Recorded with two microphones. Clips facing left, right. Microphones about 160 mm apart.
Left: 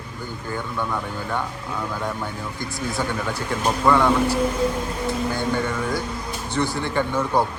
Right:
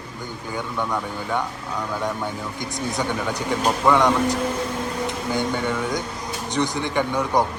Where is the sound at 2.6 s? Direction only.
20° right (ahead or behind).